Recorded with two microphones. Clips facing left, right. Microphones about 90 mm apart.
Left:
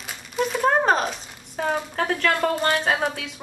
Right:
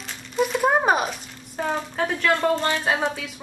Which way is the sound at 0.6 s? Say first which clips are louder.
Left 1 dB; 10° right (ahead or behind).